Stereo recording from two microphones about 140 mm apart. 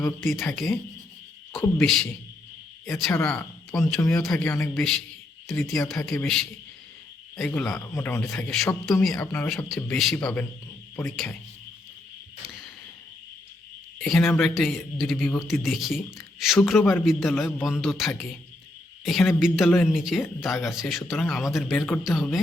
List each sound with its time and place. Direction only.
0.2 s speech: centre (ahead or behind)
4.4 s a man's voice: 20° left (ahead or behind)
4.7 s speech: 5° left (ahead or behind)
7.7 s speech: 15° left (ahead or behind); by 9.1 s centre (ahead or behind)
9.2 s speech: 15° left (ahead or behind)
9.6 s speech: centre (ahead or behind)
14.0 s speech: centre (ahead or behind)
21.8 s speech: 10° left (ahead or behind)
22.0 s speech: centre (ahead or behind)